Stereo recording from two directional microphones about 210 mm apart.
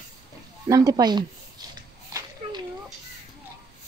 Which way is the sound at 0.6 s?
15° right (ahead or behind).